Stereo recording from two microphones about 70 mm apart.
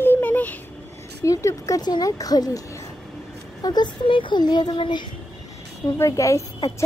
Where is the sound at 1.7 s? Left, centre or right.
Left.